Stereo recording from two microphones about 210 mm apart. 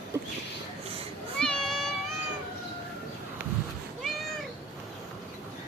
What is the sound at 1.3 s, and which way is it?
Meow, 5° left (ahead or behind).